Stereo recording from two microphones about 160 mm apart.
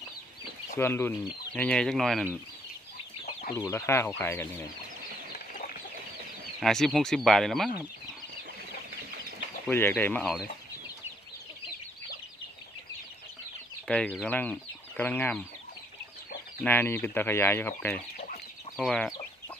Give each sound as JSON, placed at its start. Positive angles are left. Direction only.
{"t": 0.8, "sound": "speech", "side_deg": 15}
{"t": 3.5, "sound": "speech", "side_deg": 15}
{"t": 6.6, "sound": "speech", "side_deg": 0}
{"t": 9.6, "sound": "speech", "side_deg": 10}
{"t": 13.8, "sound": "speech", "side_deg": 5}
{"t": 16.6, "sound": "speech", "side_deg": 10}
{"t": 18.8, "sound": "speech", "side_deg": 0}